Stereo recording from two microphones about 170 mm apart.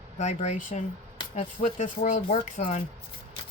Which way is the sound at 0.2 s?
40° left (ahead or behind).